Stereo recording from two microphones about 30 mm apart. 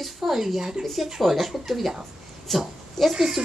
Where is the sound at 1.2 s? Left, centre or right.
Centre.